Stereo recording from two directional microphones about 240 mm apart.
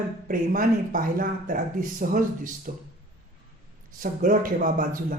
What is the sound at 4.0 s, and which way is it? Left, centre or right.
Speech, right.